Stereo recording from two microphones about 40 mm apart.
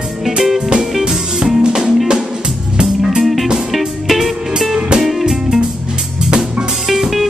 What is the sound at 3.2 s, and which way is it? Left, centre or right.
Music, centre.